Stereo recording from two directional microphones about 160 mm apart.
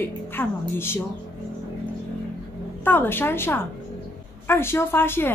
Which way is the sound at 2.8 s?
15° left (ahead or behind).